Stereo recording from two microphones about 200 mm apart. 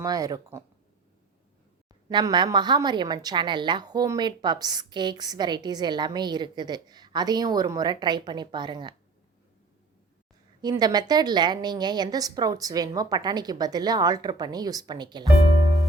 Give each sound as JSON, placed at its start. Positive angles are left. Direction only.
{"t": 0.0, "sound": "speech", "side_deg": -20}
{"t": 2.0, "sound": "a woman's voice", "side_deg": -20}
{"t": 10.6, "sound": "a woman's voice", "side_deg": -20}